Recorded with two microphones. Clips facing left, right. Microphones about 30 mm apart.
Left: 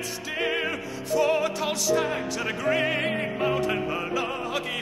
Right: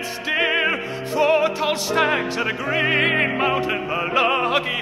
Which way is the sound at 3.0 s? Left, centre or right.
Right.